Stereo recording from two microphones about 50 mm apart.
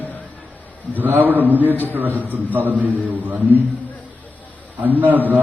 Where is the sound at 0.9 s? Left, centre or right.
Right.